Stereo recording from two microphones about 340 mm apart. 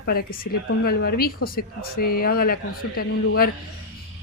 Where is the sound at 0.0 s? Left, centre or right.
Left.